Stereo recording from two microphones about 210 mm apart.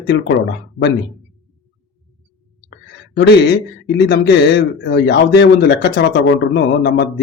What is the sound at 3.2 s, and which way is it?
A man's voice, 55° left (ahead or behind).